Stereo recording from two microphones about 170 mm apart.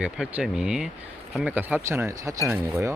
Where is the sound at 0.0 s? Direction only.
5° right (ahead or behind).